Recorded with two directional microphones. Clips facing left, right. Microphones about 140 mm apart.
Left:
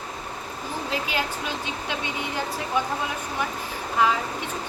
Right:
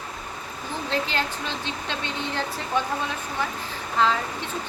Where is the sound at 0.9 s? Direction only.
10° left (ahead or behind).